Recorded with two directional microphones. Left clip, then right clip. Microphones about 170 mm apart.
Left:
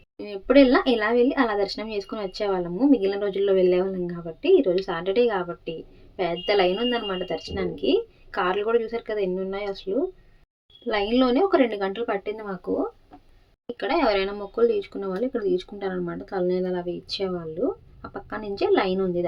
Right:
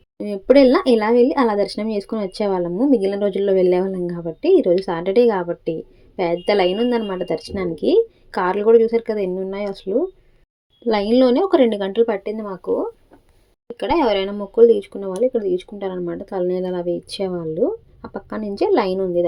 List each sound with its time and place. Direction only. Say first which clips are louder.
0.2 s speech: right 5 dB; 25° right (ahead or behind)
13.7 s speech: right 4 dB; 25° right (ahead or behind)
16.6 s speech: right 6 dB; 35° right (ahead or behind)